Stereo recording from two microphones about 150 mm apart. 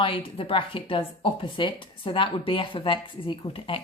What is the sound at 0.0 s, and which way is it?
Speech, 35° left (ahead or behind).